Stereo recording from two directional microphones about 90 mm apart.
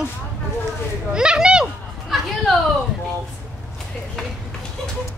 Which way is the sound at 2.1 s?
Centre (ahead or behind).